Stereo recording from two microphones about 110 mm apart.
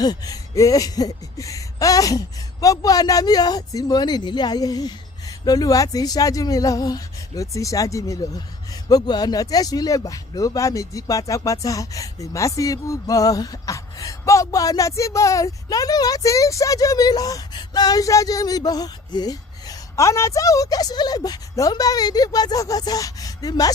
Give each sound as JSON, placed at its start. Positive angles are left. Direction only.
{"t": 0.0, "sound": "speech", "side_deg": 35}